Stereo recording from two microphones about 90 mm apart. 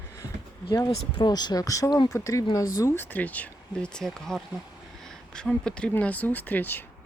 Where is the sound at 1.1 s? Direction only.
50° left (ahead or behind).